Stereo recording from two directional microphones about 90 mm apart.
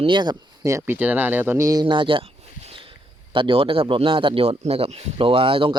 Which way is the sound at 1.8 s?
65° right (ahead or behind).